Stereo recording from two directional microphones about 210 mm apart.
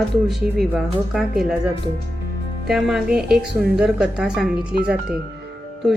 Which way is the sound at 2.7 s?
Centre (ahead or behind).